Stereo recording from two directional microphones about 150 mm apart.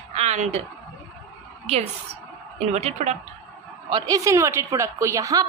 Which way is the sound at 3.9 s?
25° right (ahead or behind).